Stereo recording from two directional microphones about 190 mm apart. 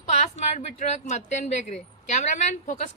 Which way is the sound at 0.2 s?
35° left (ahead or behind).